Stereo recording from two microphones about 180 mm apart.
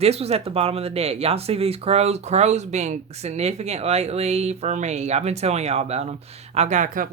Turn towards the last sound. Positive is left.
turn(degrees=-45)  # may be behind; listen again after turning